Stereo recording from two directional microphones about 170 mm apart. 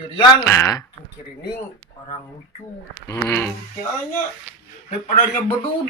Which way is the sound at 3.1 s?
15° left (ahead or behind).